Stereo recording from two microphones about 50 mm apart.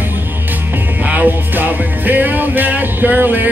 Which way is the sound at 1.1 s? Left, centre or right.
Right.